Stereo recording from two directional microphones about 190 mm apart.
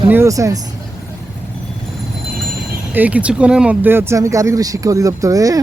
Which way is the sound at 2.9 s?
10° right (ahead or behind).